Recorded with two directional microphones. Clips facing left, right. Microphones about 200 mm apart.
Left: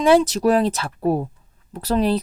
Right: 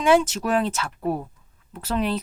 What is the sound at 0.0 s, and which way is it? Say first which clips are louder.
Speech: left 4 dB; 35° left (ahead or behind).